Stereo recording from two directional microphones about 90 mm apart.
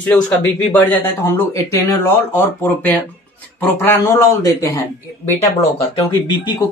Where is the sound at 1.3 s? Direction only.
35° left (ahead or behind).